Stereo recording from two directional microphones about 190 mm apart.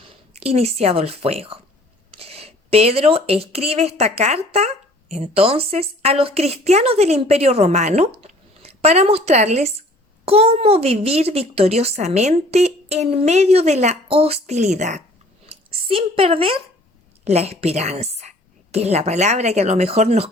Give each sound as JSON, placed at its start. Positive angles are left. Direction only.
{"t": 0.3, "sound": "speech", "side_deg": -30}